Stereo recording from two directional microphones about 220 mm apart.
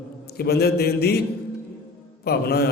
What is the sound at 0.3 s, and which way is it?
Speech, 45° left (ahead or behind).